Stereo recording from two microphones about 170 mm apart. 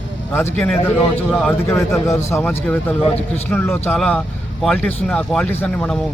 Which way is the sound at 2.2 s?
15° left (ahead or behind).